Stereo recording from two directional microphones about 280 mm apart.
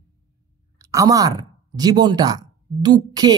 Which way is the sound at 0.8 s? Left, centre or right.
Centre.